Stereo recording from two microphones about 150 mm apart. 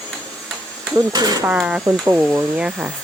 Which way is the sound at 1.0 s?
25° right (ahead or behind).